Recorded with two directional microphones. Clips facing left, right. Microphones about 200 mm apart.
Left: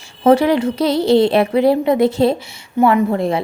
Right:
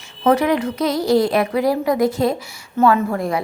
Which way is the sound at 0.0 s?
30° left (ahead or behind).